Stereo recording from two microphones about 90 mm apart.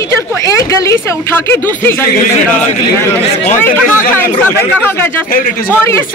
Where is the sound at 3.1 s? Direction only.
20° left (ahead or behind).